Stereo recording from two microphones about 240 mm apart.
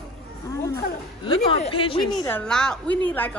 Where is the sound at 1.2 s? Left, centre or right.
Left.